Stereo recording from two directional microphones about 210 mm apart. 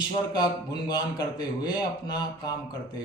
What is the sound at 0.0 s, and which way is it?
A man's voice, 20° left (ahead or behind).